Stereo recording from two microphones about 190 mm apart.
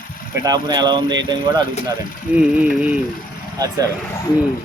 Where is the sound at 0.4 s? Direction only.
20° right (ahead or behind).